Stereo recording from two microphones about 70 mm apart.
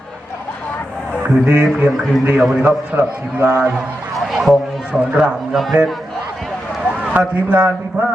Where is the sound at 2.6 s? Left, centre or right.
Right.